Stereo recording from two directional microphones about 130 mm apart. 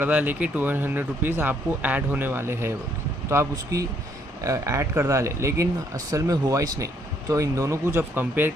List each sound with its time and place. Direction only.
0.0 s speech: 15° right (ahead or behind)